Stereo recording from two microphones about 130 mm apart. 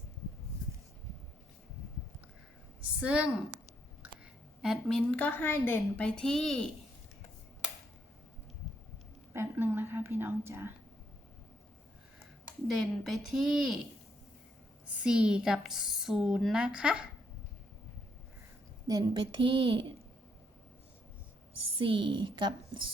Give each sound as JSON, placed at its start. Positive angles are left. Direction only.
{"t": 3.0, "sound": "speech", "side_deg": -10}
{"t": 4.6, "sound": "a woman's voice", "side_deg": 0}
{"t": 9.3, "sound": "whispering", "side_deg": -15}
{"t": 12.6, "sound": "a woman's voice", "side_deg": 0}
{"t": 14.8, "sound": "a woman's voice", "side_deg": -5}
{"t": 18.9, "sound": "a woman's voice", "side_deg": -35}
{"t": 21.8, "sound": "a woman's voice", "side_deg": -40}